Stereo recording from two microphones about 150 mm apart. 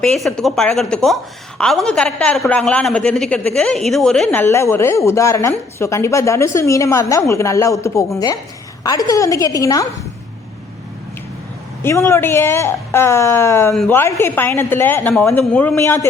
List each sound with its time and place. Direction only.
0.0 s a woman's voice: 5° left (ahead or behind); by 9.8 s 25° left (ahead or behind)
11.8 s a woman's voice: 15° left (ahead or behind)